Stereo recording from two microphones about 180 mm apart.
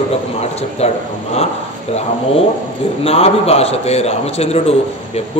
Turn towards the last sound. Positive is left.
turn(degrees=35)  # may be behind; listen again after turning